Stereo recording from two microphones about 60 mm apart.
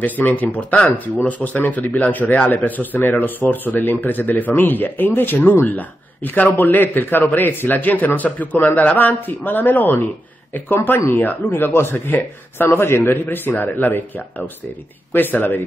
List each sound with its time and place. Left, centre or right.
0.0 s speech: left